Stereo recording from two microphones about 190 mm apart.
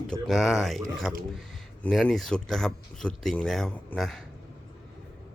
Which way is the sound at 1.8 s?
5° left (ahead or behind).